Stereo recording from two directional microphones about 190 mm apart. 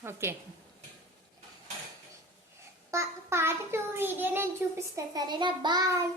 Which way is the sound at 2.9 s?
15° right (ahead or behind).